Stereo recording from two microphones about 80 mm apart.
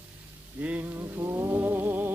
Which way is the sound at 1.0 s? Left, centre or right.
Right.